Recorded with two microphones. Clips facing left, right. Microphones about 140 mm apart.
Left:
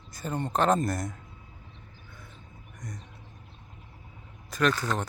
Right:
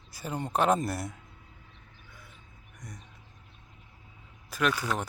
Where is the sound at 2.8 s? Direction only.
10° right (ahead or behind).